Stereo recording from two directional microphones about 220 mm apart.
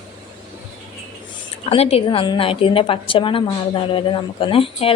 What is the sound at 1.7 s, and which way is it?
A woman's voice, 25° left (ahead or behind).